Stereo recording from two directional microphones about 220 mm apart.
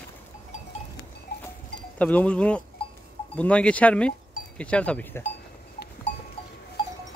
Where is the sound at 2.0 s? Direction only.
5° left (ahead or behind).